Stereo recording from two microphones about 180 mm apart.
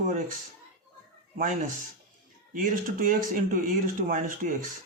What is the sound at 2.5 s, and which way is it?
Speech, 50° right (ahead or behind).